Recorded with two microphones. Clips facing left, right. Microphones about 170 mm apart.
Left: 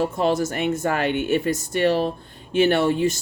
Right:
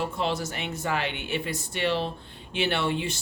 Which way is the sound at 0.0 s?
45° left (ahead or behind).